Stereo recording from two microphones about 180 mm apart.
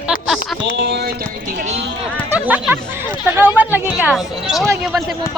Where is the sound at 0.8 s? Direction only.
70° right (ahead or behind); by 1.8 s 45° right (ahead or behind).